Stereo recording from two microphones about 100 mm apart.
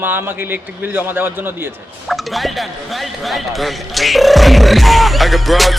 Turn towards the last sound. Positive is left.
turn(degrees=0)  # may be behind; listen again after turning